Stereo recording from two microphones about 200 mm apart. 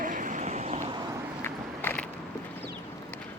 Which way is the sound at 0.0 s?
40° right (ahead or behind).